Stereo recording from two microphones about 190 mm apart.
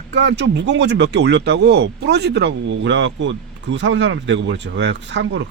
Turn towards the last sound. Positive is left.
turn(degrees=-70)  # may be behind; listen again after turning